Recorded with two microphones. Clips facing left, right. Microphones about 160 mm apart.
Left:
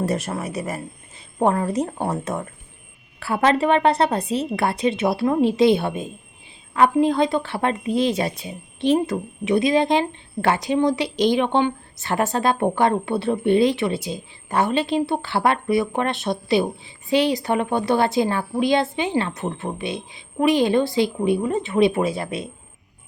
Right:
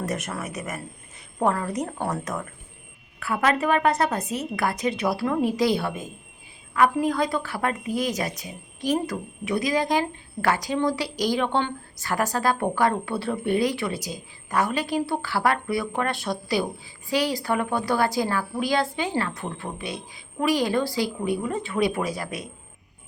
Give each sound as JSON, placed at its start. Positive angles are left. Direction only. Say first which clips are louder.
{"t": 0.0, "sound": "speech", "louder": "left 5 dB", "side_deg": 30}